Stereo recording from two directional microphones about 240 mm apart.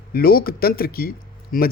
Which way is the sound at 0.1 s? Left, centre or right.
Left.